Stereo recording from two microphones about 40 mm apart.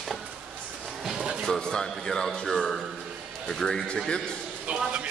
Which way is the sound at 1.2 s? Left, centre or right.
Centre.